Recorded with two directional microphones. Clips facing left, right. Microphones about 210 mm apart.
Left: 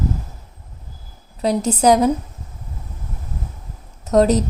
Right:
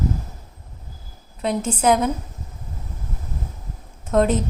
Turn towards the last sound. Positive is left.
turn(degrees=40)  # may be behind; listen again after turning